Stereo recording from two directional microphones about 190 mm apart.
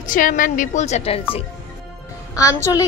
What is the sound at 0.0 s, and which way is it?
A woman's voice, 45° left (ahead or behind).